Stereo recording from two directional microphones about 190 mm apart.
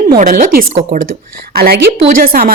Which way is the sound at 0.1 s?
45° right (ahead or behind).